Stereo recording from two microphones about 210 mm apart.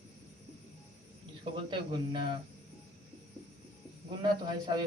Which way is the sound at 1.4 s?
20° right (ahead or behind).